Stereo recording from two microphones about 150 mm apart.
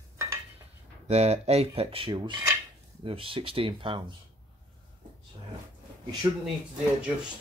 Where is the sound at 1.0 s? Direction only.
45° right (ahead or behind).